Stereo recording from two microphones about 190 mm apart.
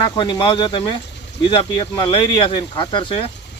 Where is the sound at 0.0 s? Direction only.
25° left (ahead or behind).